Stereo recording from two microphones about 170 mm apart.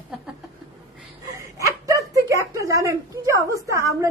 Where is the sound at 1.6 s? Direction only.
20° right (ahead or behind).